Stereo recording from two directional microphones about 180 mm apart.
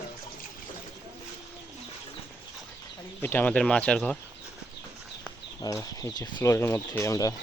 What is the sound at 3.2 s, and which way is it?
Speech, 10° left (ahead or behind).